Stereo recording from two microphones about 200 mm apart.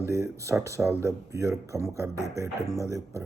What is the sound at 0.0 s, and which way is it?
Speech, 15° right (ahead or behind).